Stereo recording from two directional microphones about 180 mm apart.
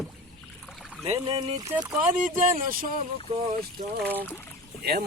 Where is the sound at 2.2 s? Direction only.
50° right (ahead or behind).